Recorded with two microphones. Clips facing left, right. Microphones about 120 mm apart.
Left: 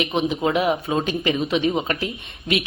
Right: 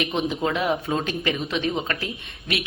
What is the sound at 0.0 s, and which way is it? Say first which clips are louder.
A woman's voice: left 3 dB; 20° left (ahead or behind).